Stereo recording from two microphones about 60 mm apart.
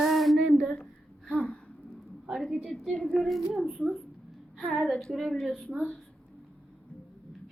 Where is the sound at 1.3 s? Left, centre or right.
Centre.